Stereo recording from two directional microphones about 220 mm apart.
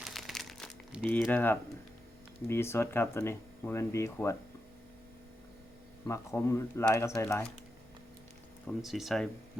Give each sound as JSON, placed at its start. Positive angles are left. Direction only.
{"t": 0.0, "sound": "crumpling", "side_deg": 0}
{"t": 2.5, "sound": "speech", "side_deg": 10}
{"t": 6.1, "sound": "speech", "side_deg": 15}
{"t": 8.6, "sound": "speech", "side_deg": 0}